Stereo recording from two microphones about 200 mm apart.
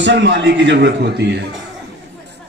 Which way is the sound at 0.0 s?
65° right (ahead or behind).